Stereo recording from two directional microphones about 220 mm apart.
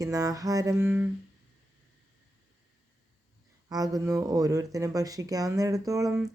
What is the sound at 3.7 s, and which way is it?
Speech, 15° right (ahead or behind).